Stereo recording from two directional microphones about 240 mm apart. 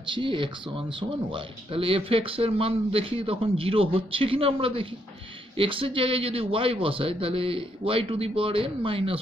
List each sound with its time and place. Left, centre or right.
0.0 s speech: right